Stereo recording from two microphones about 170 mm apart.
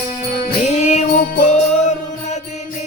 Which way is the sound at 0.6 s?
45° left (ahead or behind).